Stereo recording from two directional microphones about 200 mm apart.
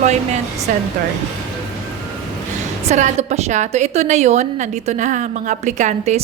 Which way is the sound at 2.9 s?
35° right (ahead or behind).